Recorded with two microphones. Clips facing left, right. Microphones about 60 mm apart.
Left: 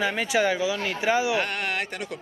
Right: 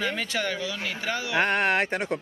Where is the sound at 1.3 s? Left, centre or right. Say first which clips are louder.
Right 4 dB; right.